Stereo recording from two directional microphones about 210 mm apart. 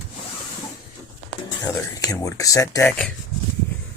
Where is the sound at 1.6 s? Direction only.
15° left (ahead or behind).